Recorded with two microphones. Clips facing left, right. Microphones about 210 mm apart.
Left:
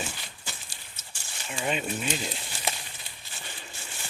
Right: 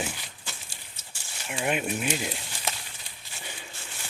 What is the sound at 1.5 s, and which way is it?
Speech, 10° right (ahead or behind).